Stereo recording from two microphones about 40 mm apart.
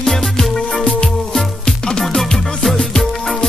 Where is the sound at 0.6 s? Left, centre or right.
Left.